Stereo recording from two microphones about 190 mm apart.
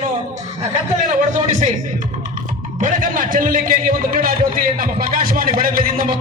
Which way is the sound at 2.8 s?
45° right (ahead or behind).